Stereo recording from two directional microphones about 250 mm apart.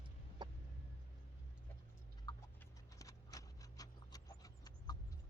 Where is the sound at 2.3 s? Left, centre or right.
Centre.